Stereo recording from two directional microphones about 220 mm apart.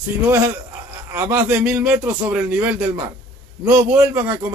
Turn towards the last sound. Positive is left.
turn(degrees=-10)  # may be behind; listen again after turning